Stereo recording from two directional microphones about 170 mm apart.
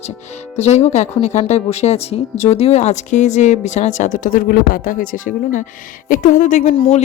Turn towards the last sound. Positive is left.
turn(degrees=35)  # may be behind; listen again after turning